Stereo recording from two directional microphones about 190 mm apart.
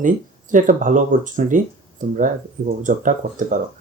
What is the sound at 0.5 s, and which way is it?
Speech, 45° right (ahead or behind).